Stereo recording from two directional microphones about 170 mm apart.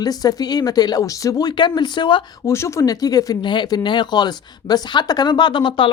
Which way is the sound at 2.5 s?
15° left (ahead or behind).